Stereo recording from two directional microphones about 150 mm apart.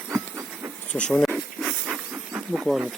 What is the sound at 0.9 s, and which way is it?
Bee, 5° left (ahead or behind).